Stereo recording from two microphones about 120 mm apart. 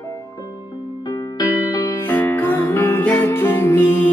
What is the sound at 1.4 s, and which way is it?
Music, 30° left (ahead or behind).